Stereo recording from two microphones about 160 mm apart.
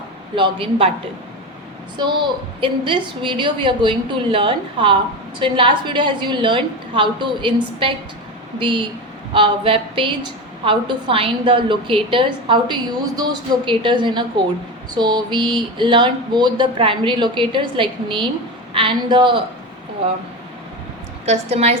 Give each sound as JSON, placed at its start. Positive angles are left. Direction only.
{"t": 0.3, "sound": "speech", "side_deg": -30}
{"t": 2.0, "sound": "a woman's voice", "side_deg": -30}
{"t": 21.2, "sound": "speech", "side_deg": -40}